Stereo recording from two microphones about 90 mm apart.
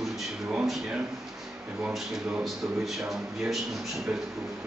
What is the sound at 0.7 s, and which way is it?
A man's voice, centre (ahead or behind).